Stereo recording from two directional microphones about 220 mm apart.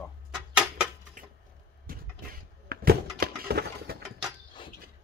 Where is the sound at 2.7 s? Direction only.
45° right (ahead or behind).